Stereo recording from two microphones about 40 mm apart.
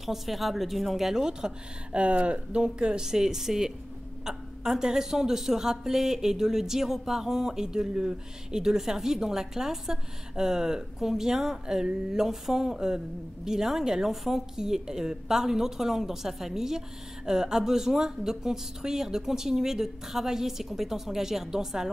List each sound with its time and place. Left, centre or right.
0.0 s a woman's voice: centre
1.9 s speech: right; by 21.9 s centre